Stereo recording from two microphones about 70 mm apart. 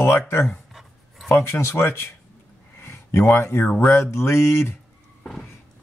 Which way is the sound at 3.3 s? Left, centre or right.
Left.